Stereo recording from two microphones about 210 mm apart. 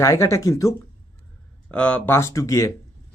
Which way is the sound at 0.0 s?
15° left (ahead or behind).